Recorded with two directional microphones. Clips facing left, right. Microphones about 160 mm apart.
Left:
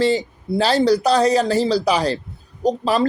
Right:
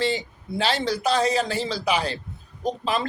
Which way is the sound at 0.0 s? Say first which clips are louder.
Left 7 dB; 40° left (ahead or behind).